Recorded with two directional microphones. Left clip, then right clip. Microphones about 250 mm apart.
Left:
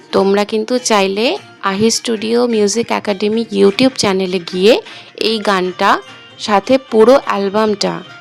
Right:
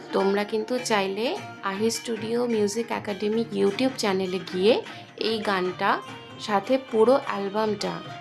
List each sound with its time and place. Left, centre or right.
0.1 s speech: right